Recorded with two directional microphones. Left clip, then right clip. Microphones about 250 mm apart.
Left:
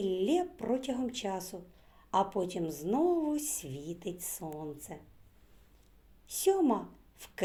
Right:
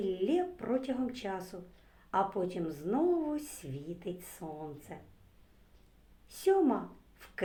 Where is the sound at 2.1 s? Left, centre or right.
Left.